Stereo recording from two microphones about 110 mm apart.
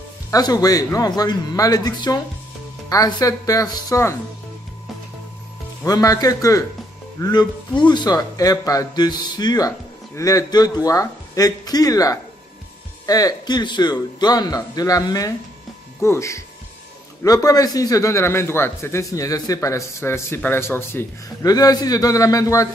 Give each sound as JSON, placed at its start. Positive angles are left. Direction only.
{"t": 0.3, "sound": "speech", "side_deg": 35}
{"t": 5.9, "sound": "a man's voice", "side_deg": 35}
{"t": 21.5, "sound": "speech", "side_deg": 35}